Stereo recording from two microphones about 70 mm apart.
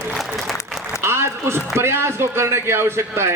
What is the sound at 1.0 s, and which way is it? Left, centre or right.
A man's voice, right.